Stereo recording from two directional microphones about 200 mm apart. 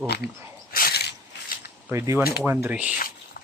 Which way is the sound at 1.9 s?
15° right (ahead or behind).